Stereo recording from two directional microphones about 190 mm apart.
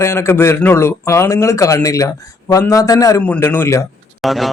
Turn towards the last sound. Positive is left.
turn(degrees=0)  # may be behind; listen again after turning